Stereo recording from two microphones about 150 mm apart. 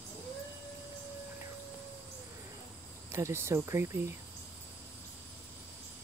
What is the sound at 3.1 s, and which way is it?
Speech, 20° right (ahead or behind).